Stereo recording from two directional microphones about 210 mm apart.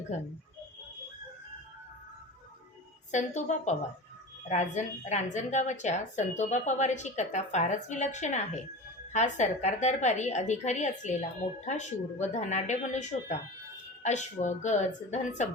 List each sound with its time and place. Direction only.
3.1 s a woman's voice: 35° left (ahead or behind)